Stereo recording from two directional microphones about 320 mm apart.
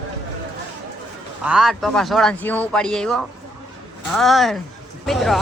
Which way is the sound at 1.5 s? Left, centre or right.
Centre.